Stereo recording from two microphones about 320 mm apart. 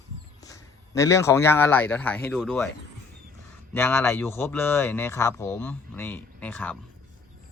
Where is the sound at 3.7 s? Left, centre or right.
Centre.